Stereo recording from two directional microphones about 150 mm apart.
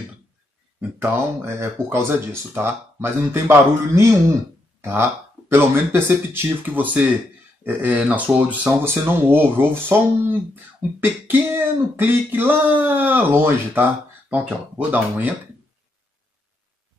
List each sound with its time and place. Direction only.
0.7 s speech: 10° right (ahead or behind)
5.5 s speech: 15° right (ahead or behind)